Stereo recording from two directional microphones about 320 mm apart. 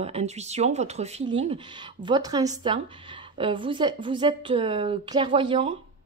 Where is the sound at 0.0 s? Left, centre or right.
Centre.